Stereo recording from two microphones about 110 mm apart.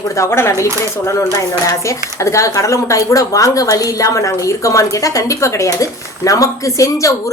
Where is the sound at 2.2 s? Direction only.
25° left (ahead or behind).